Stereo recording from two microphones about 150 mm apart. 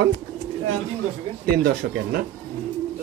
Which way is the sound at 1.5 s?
90° right.